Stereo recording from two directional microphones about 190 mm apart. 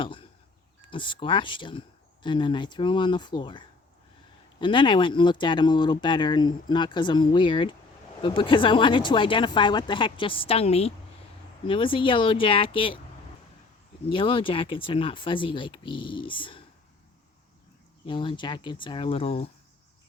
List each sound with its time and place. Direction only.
0.0 s a sound: 25° left (ahead or behind)
0.8 s speech: 25° left (ahead or behind)
14.1 s speech: 25° left (ahead or behind)
18.0 s speech: 25° left (ahead or behind)